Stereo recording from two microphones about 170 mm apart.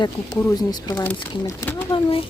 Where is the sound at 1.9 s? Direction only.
30° left (ahead or behind).